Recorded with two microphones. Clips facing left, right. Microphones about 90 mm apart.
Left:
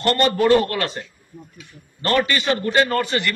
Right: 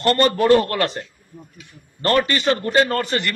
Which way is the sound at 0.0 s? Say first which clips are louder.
Right 1 dB; 40° right (ahead or behind).